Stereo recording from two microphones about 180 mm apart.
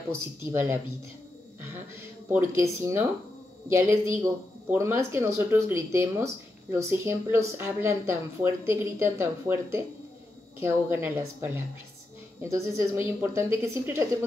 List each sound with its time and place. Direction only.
0.5 s a woman's voice: 15° right (ahead or behind)
2.3 s a woman's voice: 15° right (ahead or behind)
4.1 s a woman's voice: 15° right (ahead or behind)